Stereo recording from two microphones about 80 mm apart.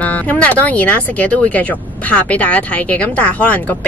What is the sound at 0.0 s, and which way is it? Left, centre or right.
Speech, centre.